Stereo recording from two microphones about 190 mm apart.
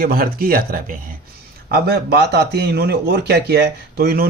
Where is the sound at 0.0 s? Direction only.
50° right (ahead or behind).